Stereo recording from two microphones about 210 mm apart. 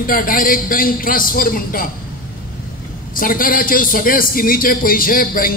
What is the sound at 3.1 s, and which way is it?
A man's voice, 40° left (ahead or behind).